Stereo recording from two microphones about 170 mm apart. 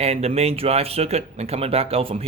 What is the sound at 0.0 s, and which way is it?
Speech, 35° right (ahead or behind).